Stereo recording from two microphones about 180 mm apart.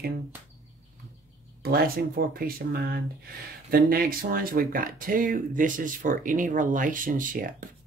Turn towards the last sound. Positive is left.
turn(degrees=-50)  # may be behind; listen again after turning